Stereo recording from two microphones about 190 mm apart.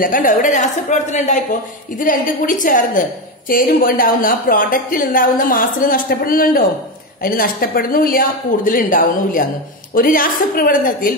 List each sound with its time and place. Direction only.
0.0 s a woman's voice: 45° left (ahead or behind)